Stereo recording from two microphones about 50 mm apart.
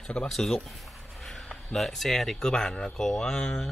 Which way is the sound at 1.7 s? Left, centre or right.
Centre.